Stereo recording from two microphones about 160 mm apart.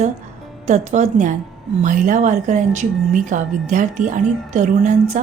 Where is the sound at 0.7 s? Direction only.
45° right (ahead or behind).